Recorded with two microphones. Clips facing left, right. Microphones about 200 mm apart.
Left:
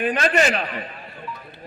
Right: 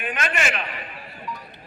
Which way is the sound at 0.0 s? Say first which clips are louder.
Left 7 dB; 35° left (ahead or behind).